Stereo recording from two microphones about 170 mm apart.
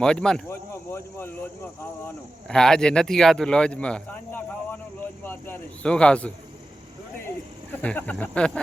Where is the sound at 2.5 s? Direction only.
5° left (ahead or behind).